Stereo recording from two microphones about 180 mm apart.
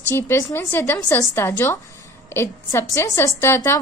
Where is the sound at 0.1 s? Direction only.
15° left (ahead or behind).